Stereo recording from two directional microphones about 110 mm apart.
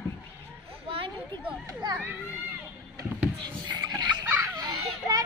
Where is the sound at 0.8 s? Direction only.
55° right (ahead or behind).